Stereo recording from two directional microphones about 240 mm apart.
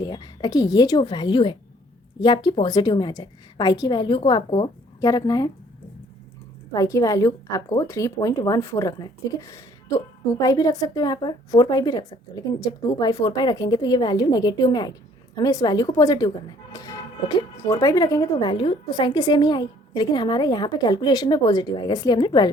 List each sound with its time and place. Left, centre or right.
0.0 s speech: centre
6.7 s speech: centre